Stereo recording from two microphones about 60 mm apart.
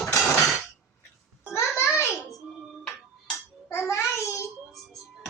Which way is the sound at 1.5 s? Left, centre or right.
Left.